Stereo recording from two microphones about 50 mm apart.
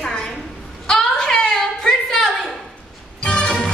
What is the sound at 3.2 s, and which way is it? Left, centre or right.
Music, centre.